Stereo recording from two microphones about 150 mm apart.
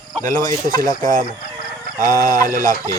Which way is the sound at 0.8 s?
65° right (ahead or behind).